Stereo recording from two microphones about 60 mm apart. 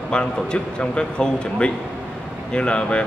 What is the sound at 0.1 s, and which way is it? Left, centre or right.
A man's voice, centre.